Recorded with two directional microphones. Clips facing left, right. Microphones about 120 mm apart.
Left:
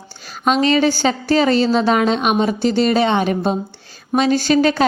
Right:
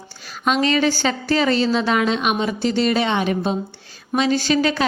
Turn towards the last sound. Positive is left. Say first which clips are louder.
# left 4 dB
turn(degrees=45)  # may be behind; listen again after turning